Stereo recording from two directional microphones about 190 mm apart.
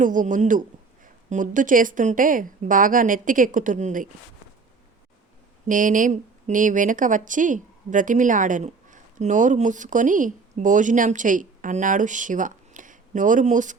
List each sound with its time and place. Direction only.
0.0 s a woman's voice: 45° right (ahead or behind)
5.6 s a woman's voice: 45° right (ahead or behind)